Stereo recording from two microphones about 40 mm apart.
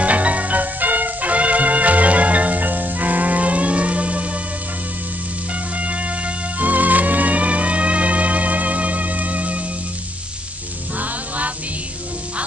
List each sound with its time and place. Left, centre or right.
0.0 s music: right
5.5 s music: right
11.0 s music: right